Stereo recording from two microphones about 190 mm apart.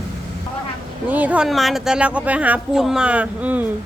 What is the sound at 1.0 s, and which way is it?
Speech, 10° right (ahead or behind).